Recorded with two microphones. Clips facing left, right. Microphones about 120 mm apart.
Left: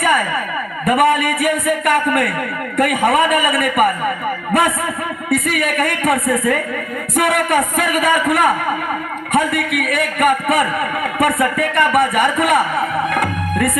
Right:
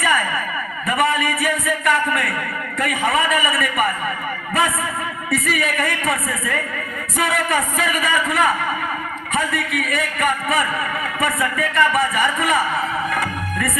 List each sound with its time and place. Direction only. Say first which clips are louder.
0.0 s a sound: left 4 dB; 55° left (ahead or behind)
0.9 s a man's voice: left 5 dB; 55° left (ahead or behind)
5.5 s a man's voice: left 3 dB; 55° left (ahead or behind)